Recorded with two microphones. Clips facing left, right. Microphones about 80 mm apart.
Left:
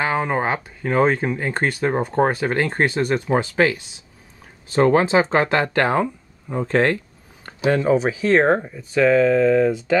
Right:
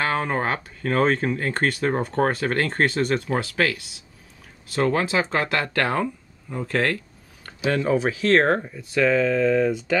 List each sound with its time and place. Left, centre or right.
0.0 s speech: centre
3.3 s speech: left